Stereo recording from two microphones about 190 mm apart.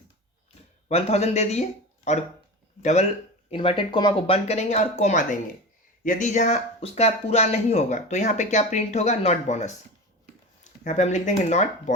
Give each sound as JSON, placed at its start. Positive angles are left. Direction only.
{"t": 0.9, "sound": "speech", "side_deg": 35}
{"t": 2.8, "sound": "speech", "side_deg": 35}